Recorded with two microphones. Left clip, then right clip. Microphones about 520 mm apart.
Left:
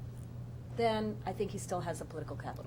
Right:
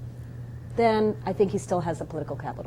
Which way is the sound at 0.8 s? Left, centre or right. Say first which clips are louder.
Right 11 dB; right.